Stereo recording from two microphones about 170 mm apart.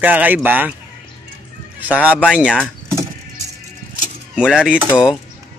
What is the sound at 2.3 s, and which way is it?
Cutlery, 5° right (ahead or behind).